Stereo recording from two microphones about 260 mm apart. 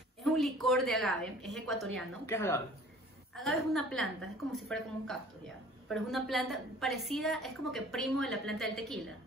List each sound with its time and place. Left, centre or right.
0.2 s a woman's voice: centre